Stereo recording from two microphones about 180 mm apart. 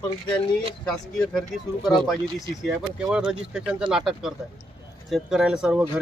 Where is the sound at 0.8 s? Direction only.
Centre (ahead or behind).